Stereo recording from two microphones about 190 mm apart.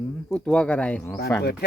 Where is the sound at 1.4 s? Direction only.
55° left (ahead or behind).